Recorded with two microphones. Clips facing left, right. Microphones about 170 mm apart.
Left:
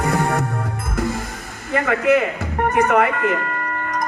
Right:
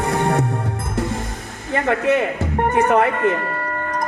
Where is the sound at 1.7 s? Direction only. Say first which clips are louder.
Left 1 dB; 30° right (ahead or behind).